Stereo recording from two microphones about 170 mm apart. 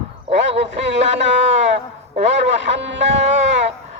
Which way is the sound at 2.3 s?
90° right.